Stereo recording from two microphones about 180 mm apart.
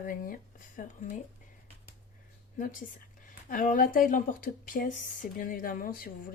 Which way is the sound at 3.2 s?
45° left (ahead or behind).